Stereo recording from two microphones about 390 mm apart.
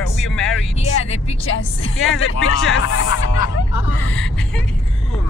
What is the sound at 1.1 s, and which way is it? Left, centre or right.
Speech, centre.